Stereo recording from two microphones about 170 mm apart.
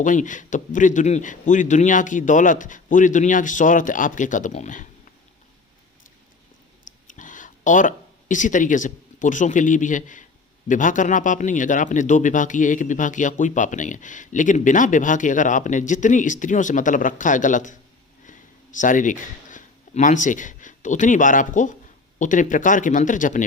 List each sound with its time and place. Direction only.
0.0 s a man's voice: 50° left (ahead or behind)
6.8 s a sound: 50° left (ahead or behind)
10.7 s a man's voice: 50° left (ahead or behind)